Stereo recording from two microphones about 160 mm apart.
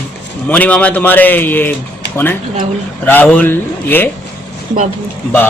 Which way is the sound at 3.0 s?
10° left (ahead or behind).